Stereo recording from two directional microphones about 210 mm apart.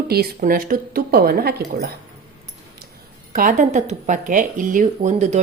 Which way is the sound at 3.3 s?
40° right (ahead or behind).